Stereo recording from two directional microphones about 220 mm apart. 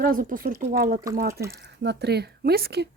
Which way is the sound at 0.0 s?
40° right (ahead or behind).